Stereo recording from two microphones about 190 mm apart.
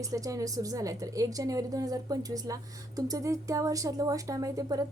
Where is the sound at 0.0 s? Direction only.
15° right (ahead or behind).